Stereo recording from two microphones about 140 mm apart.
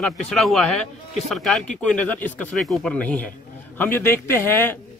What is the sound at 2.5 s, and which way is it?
A man's voice, centre (ahead or behind).